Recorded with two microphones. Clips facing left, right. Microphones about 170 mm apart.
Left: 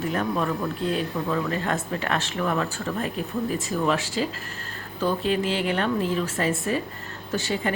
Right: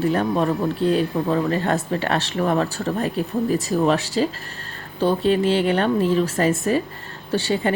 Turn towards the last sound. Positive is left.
turn(degrees=-35)  # may be behind; listen again after turning